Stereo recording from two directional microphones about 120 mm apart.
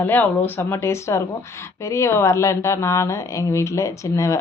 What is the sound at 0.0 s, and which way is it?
A woman's voice, 15° left (ahead or behind).